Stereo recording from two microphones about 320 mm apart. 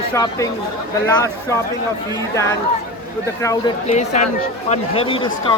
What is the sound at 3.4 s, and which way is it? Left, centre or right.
Speech, centre.